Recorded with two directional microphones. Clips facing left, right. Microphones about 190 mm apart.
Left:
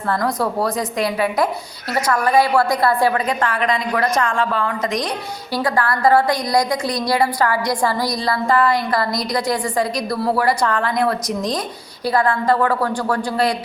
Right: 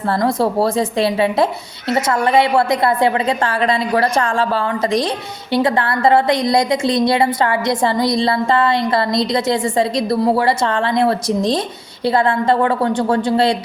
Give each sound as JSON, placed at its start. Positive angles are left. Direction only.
{"t": 0.1, "sound": "a woman's voice", "side_deg": -25}